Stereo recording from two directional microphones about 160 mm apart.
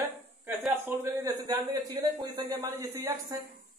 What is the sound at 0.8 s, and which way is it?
A man's voice, 20° right (ahead or behind).